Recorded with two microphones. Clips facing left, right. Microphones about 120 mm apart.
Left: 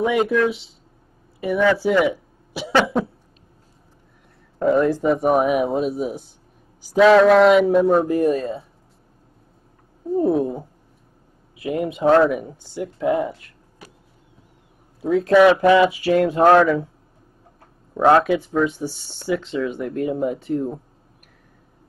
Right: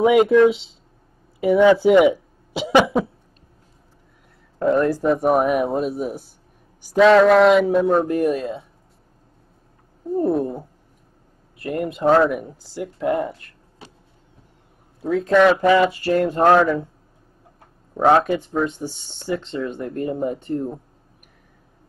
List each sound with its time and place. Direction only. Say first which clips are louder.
0.0 s speech: right 5 dB; 20° right (ahead or behind)
4.6 s speech: left 1 dB; centre (ahead or behind)
10.0 s speech: left 1 dB; centre (ahead or behind)
13.8 s vehicle: right 1 dB; 25° right (ahead or behind)
15.0 s speech: left 2 dB; 5° left (ahead or behind)
17.9 s speech: left 1 dB; centre (ahead or behind)